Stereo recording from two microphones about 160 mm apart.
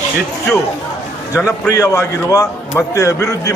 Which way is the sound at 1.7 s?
20° left (ahead or behind).